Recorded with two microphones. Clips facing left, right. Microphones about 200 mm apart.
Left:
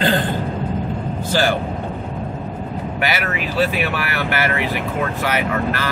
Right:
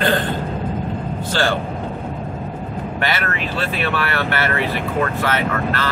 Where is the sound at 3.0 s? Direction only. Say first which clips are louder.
Left 1 dB; 10° left (ahead or behind).